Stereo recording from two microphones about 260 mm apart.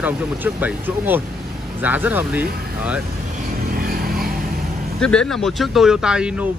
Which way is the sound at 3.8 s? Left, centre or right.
Right.